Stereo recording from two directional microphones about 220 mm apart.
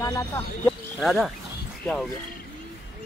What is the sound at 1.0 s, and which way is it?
Speech, centre (ahead or behind).